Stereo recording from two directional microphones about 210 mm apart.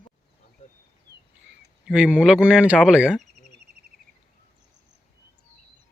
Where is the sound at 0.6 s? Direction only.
35° left (ahead or behind).